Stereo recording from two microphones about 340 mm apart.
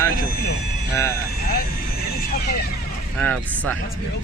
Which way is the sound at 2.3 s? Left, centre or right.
Left.